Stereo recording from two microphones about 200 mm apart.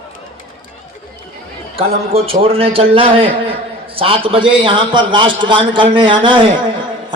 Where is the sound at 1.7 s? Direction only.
30° right (ahead or behind).